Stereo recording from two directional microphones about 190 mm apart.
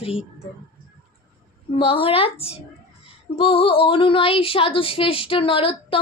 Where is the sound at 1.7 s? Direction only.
30° left (ahead or behind).